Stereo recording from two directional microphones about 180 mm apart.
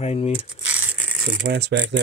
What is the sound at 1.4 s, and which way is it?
Speech, 65° right (ahead or behind).